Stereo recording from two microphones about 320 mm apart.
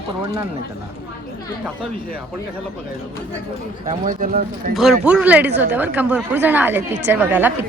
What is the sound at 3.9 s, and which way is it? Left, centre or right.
Speech, right.